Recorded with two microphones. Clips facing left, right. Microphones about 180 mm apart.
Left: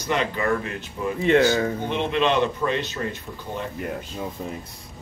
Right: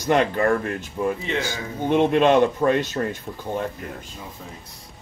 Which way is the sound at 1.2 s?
55° left (ahead or behind).